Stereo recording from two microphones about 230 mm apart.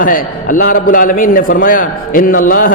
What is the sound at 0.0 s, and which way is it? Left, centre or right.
A man's voice, left.